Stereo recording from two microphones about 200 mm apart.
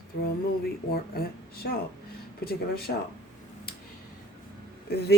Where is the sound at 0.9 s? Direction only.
50° left (ahead or behind).